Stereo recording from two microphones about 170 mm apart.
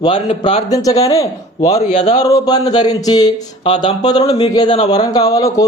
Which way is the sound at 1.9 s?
40° left (ahead or behind).